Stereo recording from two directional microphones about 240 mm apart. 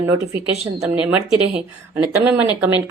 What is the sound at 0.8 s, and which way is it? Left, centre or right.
Speech, centre.